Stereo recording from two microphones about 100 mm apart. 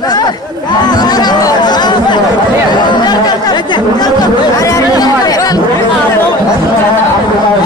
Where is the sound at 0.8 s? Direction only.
45° left (ahead or behind).